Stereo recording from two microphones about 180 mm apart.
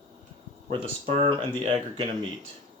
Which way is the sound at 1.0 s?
30° right (ahead or behind).